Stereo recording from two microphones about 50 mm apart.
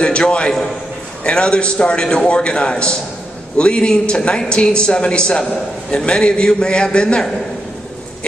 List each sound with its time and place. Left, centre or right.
0.0 s a man's voice: centre